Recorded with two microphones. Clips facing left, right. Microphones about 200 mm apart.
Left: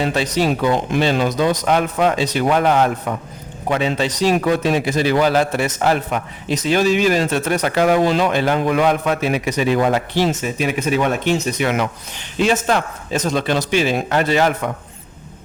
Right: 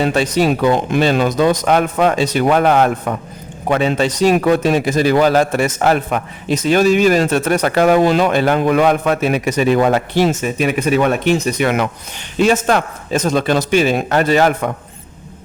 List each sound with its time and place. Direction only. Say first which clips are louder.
0.1 s speech: right 3 dB; 50° right (ahead or behind)